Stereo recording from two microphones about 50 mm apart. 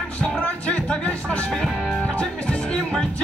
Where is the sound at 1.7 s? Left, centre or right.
Centre.